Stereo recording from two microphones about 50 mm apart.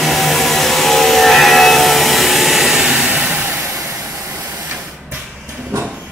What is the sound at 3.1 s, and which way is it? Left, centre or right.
Vehicle, right.